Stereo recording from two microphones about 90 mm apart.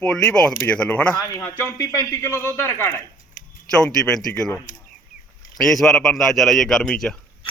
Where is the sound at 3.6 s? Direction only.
5° left (ahead or behind).